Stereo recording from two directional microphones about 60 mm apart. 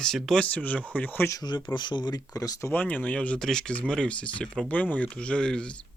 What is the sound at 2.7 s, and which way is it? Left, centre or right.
Speech, left.